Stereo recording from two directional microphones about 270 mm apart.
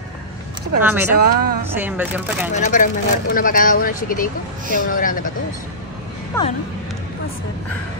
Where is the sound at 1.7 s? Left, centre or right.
Centre.